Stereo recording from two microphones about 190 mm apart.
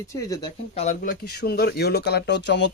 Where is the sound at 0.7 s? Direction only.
40° left (ahead or behind).